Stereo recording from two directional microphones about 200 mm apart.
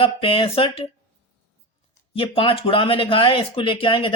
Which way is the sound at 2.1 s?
25° left (ahead or behind).